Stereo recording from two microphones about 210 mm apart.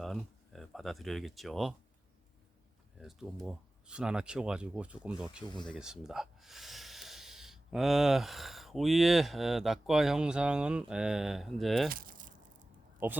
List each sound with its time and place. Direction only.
0.0 s speech: centre (ahead or behind)
3.0 s speech: centre (ahead or behind)
5.5 s speech: 20° left (ahead or behind)
5.7 s speech: centre (ahead or behind)
11.9 s a sound: 40° right (ahead or behind)
13.0 s speech: 10° right (ahead or behind)